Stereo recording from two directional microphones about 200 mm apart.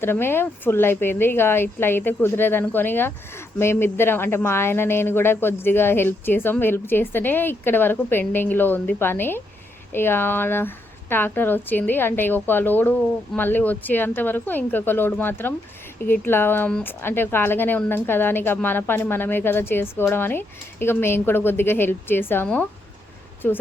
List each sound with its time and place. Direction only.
0.0 s speech: 10° left (ahead or behind)